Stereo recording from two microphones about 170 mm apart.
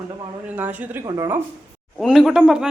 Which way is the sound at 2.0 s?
Centre (ahead or behind).